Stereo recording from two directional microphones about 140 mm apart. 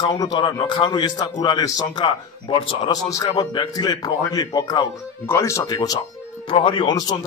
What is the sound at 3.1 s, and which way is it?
A man's voice, 25° left (ahead or behind).